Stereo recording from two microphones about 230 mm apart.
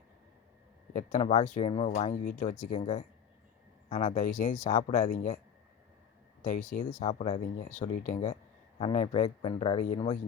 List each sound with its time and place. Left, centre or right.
0.9 s speech: left
7.0 s speech: left